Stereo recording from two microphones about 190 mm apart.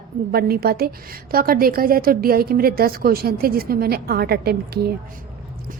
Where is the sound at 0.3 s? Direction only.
55° right (ahead or behind).